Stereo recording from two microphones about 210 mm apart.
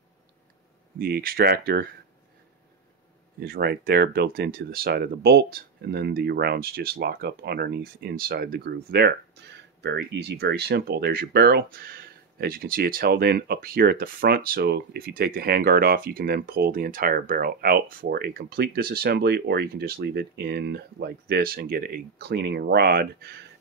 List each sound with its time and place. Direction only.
0.9 s speech: 45° right (ahead or behind)
3.3 s speech: 45° right (ahead or behind)